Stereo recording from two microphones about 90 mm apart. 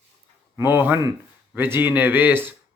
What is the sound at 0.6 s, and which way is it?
Speech, 25° right (ahead or behind).